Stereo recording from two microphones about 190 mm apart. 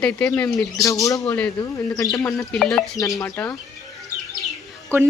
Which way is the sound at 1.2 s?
5° left (ahead or behind).